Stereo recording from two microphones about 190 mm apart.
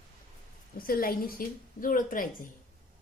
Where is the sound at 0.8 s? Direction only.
50° left (ahead or behind).